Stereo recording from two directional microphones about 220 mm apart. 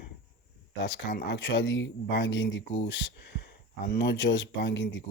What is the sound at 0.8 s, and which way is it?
Speech, 55° left (ahead or behind).